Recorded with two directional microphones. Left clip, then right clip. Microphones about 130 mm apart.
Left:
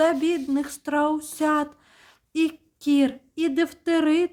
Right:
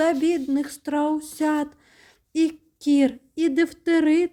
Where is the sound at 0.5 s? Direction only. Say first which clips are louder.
Left 1 dB; 15° right (ahead or behind).